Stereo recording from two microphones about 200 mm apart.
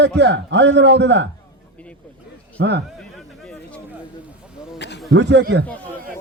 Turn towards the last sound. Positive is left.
turn(degrees=-60)  # may be behind; listen again after turning